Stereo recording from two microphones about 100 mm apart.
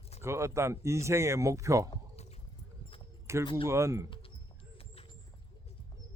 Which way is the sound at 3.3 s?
30° right (ahead or behind).